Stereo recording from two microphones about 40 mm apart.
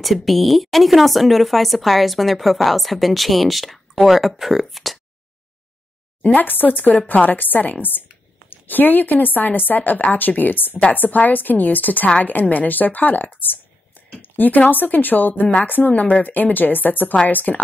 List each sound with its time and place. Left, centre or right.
0.0 s speech: centre
6.2 s speech: left
15.9 s speech: left